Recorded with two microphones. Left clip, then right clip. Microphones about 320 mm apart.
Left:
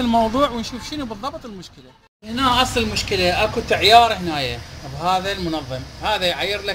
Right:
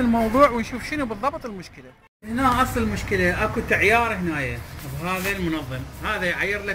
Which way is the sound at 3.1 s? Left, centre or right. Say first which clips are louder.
Left 2 dB; left.